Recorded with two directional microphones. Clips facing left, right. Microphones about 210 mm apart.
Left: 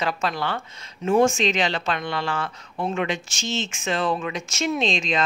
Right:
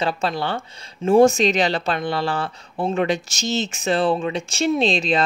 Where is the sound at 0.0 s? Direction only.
30° right (ahead or behind).